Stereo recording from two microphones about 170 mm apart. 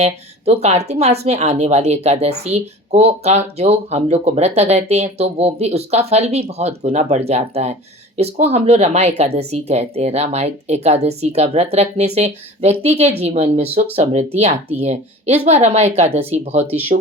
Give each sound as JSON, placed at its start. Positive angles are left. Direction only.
{"t": 0.0, "sound": "speech", "side_deg": -40}